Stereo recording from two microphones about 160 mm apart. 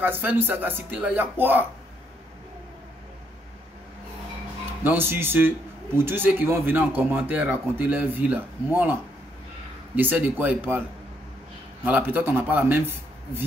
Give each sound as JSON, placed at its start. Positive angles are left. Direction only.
{"t": 0.0, "sound": "a man's voice", "side_deg": -10}
{"t": 4.8, "sound": "a man's voice", "side_deg": -15}
{"t": 9.9, "sound": "a man's voice", "side_deg": -10}
{"t": 11.8, "sound": "a man's voice", "side_deg": -10}